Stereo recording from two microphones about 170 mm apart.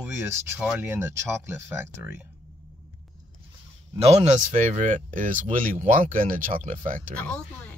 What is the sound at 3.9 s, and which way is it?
Speech, 40° right (ahead or behind).